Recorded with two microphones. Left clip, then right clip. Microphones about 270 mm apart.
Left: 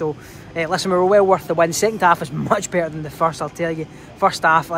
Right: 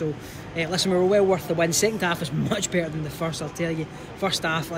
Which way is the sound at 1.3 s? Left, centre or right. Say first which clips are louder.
Left 7 dB; centre.